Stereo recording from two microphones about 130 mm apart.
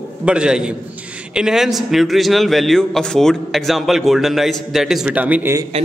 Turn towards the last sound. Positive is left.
turn(degrees=-10)  # may be behind; listen again after turning